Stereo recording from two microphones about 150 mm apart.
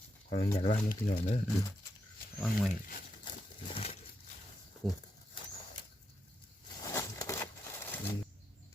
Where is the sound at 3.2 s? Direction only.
35° left (ahead or behind).